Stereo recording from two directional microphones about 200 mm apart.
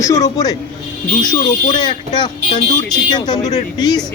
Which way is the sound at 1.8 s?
20° left (ahead or behind).